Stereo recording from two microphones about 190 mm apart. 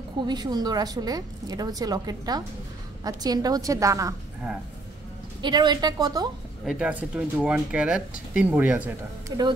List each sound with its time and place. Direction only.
0.3 s speech: 20° right (ahead or behind)
5.4 s speech: 25° right (ahead or behind)
6.6 s speech: 5° right (ahead or behind)
9.3 s speech: 20° right (ahead or behind)